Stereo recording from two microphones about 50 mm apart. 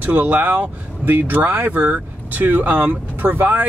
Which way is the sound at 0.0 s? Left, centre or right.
Right.